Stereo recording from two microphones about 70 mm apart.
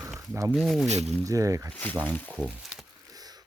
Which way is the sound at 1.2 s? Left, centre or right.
Right.